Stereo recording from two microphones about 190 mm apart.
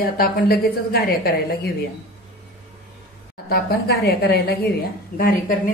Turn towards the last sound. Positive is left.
turn(degrees=45)  # may be behind; listen again after turning